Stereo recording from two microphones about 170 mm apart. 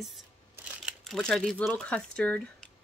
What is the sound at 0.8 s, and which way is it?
Speech, centre (ahead or behind).